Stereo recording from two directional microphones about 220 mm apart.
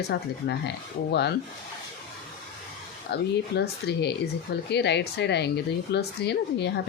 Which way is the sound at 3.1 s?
45° left (ahead or behind).